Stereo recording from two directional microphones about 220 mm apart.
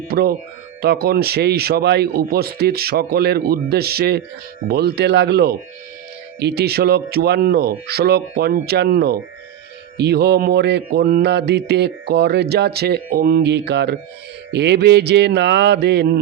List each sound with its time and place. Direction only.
0.1 s mantra: 45° right (ahead or behind)